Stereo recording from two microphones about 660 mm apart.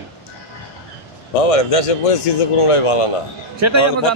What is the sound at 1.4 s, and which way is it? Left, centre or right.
A man's voice, left.